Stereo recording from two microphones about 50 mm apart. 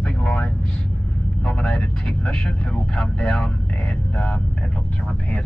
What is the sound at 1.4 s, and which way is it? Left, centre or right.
Vehicle, left.